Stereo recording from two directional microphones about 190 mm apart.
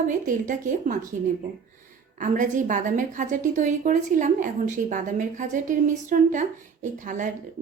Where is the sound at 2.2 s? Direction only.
40° right (ahead or behind).